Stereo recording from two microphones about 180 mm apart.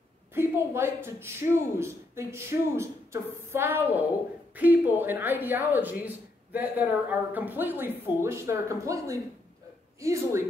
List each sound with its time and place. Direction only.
0.3 s speech: 15° right (ahead or behind)